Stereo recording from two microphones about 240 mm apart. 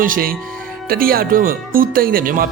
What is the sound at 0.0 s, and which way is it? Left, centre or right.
A man's voice, right.